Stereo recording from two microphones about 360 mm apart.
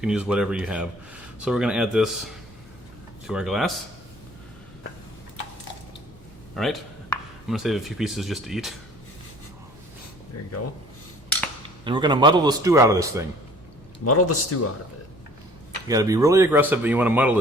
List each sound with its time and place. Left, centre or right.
0.0 s speech: centre
6.6 s speech: centre
11.9 s speech: centre
14.0 s a man's voice: left
15.9 s speech: centre